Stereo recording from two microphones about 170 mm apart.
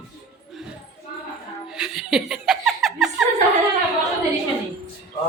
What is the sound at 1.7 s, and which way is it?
Chuckle, 5° right (ahead or behind).